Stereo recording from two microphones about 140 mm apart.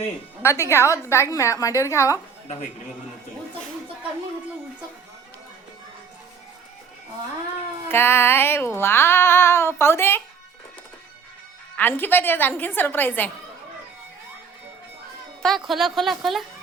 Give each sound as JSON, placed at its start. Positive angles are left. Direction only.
{"t": 0.4, "sound": "a woman's voice", "side_deg": 20}
{"t": 7.9, "sound": "speech", "side_deg": 15}
{"t": 11.8, "sound": "speech", "side_deg": 15}
{"t": 15.4, "sound": "a woman's voice", "side_deg": 0}